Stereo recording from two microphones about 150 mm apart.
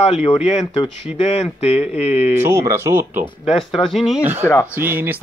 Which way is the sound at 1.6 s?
45° left (ahead or behind).